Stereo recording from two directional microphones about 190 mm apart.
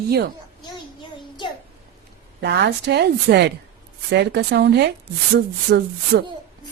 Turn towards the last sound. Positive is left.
turn(degrees=-55)  # may be behind; listen again after turning